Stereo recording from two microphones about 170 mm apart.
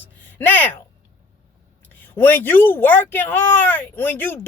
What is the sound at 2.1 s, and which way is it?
Speech, 10° left (ahead or behind).